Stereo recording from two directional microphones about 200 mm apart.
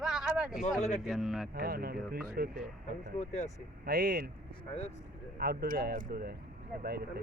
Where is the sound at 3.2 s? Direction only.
35° left (ahead or behind).